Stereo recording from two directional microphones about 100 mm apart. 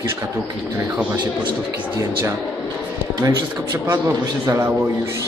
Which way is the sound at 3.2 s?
35° right (ahead or behind).